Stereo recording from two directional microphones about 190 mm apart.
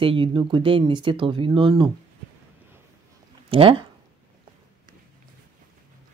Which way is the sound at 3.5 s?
30° right (ahead or behind).